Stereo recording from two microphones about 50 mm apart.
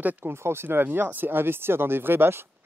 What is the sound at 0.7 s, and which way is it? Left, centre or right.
Speech, right.